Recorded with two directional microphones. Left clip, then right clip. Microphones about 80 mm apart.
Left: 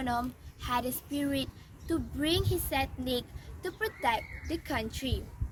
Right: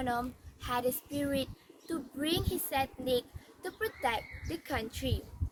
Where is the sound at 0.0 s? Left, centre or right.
Right.